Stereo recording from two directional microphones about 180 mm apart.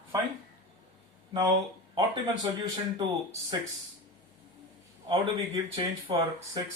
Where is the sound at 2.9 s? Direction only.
20° right (ahead or behind).